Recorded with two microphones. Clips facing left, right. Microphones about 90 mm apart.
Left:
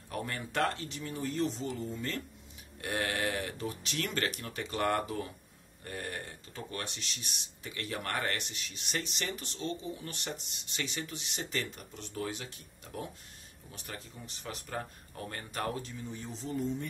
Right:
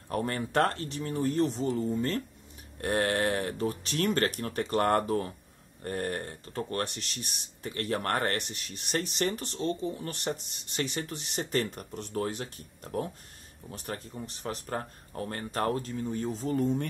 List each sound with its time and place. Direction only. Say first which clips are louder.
0.1 s speech: right 7 dB; 45° right (ahead or behind)